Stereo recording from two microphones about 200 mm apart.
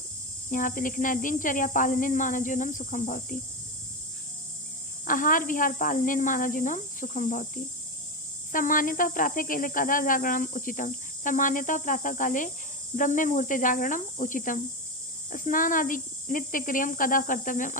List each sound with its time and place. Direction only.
0.5 s speech: 40° left (ahead or behind)
5.0 s speech: 40° left (ahead or behind)